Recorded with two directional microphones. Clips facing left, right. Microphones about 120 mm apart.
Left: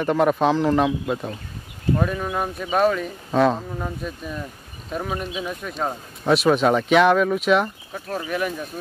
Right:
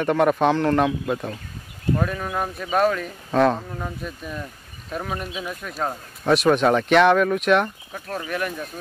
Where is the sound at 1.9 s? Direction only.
5° left (ahead or behind).